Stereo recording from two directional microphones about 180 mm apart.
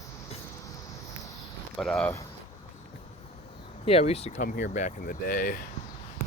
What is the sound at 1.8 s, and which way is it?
Speech, 5° left (ahead or behind).